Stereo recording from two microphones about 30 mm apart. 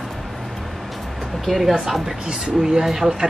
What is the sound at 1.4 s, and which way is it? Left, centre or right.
Speech, centre.